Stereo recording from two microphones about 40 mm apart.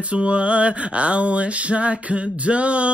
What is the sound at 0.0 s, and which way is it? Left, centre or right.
Mantra, right.